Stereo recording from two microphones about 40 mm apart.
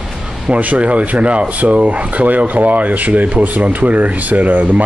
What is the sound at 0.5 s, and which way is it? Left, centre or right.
Speech, right.